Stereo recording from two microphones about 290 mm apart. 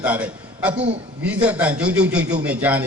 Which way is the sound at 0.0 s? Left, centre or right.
Centre.